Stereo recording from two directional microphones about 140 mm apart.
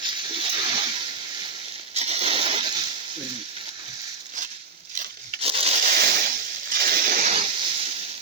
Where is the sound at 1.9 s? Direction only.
50° right (ahead or behind).